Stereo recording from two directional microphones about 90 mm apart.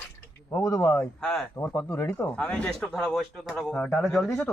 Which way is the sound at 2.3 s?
10° left (ahead or behind).